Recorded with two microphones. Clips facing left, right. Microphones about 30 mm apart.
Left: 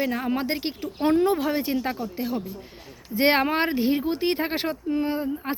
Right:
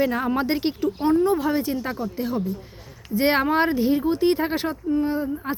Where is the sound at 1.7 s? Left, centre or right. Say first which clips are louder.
Even; left.